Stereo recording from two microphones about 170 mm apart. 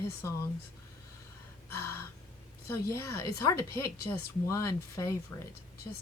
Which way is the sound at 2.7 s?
15° left (ahead or behind).